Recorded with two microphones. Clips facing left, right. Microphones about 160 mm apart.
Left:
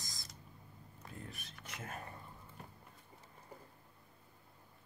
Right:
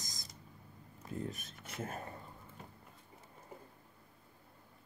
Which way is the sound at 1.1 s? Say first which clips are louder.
Right 10 dB; 40° right (ahead or behind).